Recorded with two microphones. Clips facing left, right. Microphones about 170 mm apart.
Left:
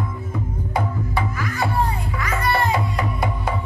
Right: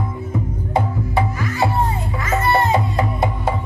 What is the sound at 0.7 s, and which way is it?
Music, 25° right (ahead or behind).